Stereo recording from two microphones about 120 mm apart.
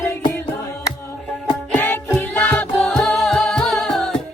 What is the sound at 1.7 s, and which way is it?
Music, 15° left (ahead or behind).